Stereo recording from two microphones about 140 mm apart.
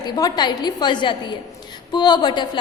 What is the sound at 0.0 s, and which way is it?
A woman's voice, 30° left (ahead or behind).